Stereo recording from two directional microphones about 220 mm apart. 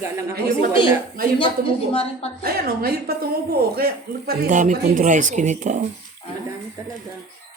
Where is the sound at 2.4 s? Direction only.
45° right (ahead or behind).